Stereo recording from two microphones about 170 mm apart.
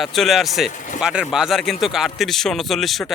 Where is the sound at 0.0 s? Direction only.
Centre (ahead or behind).